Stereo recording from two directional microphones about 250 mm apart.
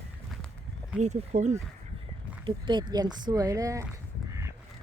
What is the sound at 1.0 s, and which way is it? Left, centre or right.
Speech, right.